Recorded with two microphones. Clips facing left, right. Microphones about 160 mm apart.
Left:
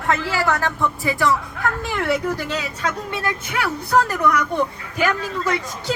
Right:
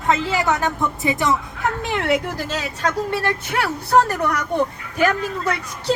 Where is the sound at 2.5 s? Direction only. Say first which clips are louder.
Right 2 dB; 40° right (ahead or behind).